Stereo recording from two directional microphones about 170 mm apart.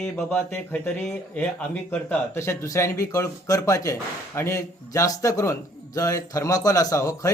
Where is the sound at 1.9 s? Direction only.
10° left (ahead or behind).